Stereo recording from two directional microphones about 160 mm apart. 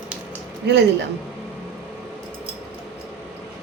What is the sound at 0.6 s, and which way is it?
Speech, 90° right.